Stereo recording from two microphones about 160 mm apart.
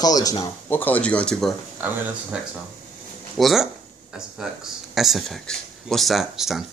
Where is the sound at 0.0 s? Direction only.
25° left (ahead or behind).